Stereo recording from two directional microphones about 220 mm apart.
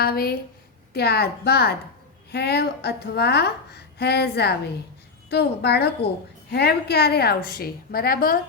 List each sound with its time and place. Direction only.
0.0 s a woman's voice: 45° left (ahead or behind)